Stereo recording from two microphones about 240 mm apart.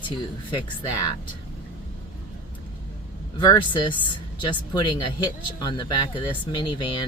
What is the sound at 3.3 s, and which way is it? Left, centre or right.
Speech, centre.